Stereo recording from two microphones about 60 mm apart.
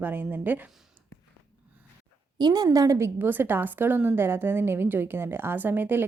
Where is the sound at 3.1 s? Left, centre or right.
Right.